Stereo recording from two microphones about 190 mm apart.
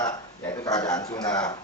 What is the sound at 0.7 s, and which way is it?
Speech, 20° left (ahead or behind).